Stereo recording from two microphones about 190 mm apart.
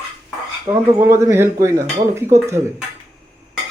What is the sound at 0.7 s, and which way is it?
Speech, 15° right (ahead or behind).